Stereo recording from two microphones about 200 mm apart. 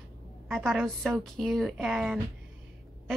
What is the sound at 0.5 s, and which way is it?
A woman's voice, centre (ahead or behind).